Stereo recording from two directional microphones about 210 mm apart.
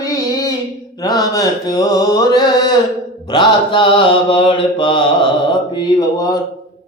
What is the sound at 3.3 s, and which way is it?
Mantra, 20° left (ahead or behind).